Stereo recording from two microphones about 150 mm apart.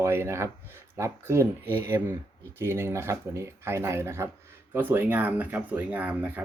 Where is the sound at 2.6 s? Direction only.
15° right (ahead or behind).